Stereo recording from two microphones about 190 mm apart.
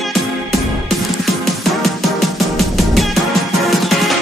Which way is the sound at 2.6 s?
Centre (ahead or behind).